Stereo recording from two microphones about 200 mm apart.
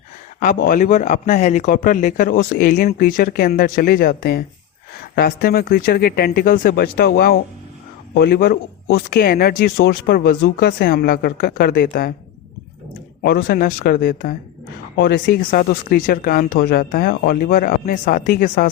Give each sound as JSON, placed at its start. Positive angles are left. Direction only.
{"t": 0.7, "sound": "speech", "side_deg": 40}
{"t": 13.2, "sound": "speech", "side_deg": 50}